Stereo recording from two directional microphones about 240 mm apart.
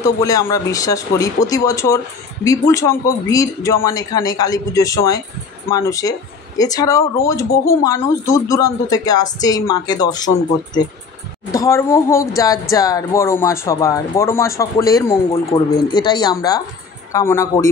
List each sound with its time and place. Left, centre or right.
0.0 s speech: centre
15.5 s speech: left; by 17.6 s centre